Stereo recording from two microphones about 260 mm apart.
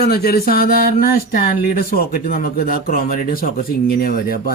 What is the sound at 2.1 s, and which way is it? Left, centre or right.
Speech, left.